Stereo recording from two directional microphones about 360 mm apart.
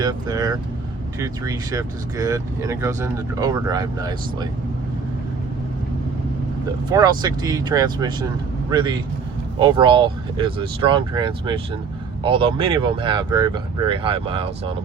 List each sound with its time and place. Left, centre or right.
0.0 s speech: centre
6.9 s speech: centre